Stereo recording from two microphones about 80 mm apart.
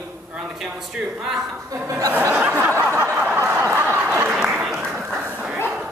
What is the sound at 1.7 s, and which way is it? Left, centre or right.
Speech, right.